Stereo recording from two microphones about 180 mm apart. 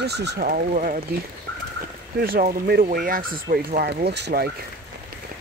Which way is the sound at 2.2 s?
55° right (ahead or behind).